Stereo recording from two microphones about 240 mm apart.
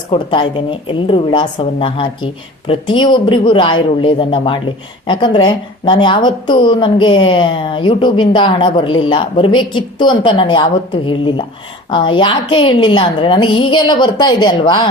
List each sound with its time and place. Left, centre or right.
0.1 s a woman's voice: left